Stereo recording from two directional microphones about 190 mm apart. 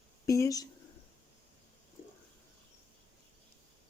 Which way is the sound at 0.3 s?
15° left (ahead or behind).